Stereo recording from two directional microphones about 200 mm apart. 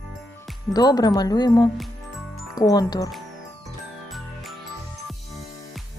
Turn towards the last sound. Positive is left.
turn(degrees=0)  # may be behind; listen again after turning